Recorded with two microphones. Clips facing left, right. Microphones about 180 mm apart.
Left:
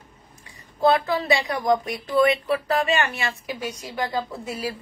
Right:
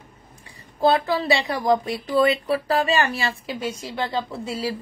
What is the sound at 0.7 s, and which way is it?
A woman's voice, 30° right (ahead or behind).